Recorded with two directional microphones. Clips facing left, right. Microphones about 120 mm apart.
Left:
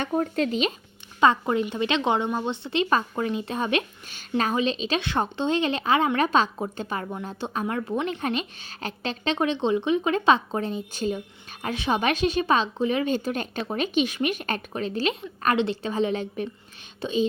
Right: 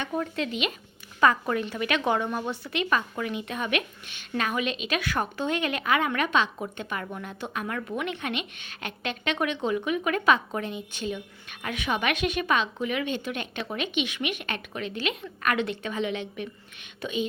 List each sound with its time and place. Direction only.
0.0 s speech: 45° left (ahead or behind)
1.2 s speech: 25° left (ahead or behind)